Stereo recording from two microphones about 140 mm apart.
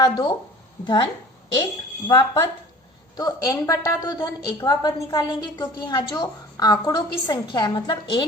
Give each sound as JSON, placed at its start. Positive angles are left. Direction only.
{"t": 0.0, "sound": "a woman's voice", "side_deg": 30}